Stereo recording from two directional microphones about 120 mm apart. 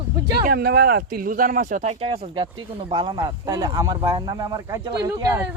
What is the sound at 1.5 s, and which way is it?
Speech, 80° right.